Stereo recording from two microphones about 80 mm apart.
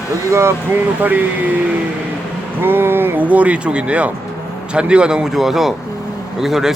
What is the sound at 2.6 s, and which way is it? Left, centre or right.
Speech, right.